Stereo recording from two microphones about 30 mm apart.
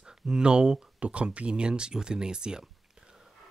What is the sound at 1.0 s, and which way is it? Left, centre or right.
Speech, right.